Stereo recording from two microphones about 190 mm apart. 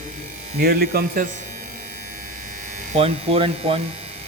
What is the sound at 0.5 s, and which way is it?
Speech, 55° right (ahead or behind).